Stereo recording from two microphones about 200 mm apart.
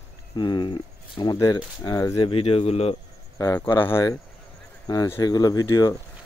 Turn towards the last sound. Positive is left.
turn(degrees=20)  # may be behind; listen again after turning